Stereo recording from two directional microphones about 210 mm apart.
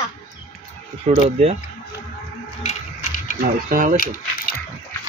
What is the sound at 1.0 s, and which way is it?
Speech, 30° right (ahead or behind).